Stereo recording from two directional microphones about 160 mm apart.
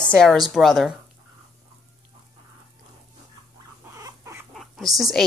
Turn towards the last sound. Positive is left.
turn(degrees=0)  # may be behind; listen again after turning